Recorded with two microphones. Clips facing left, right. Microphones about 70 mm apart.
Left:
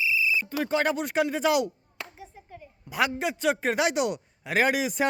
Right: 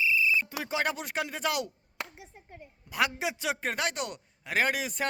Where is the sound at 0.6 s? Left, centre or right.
Centre.